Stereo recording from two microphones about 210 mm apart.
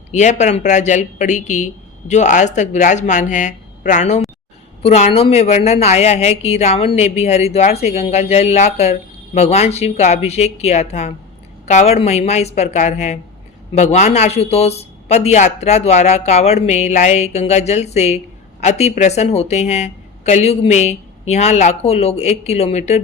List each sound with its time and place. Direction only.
0.1 s a woman's voice: 35° left (ahead or behind)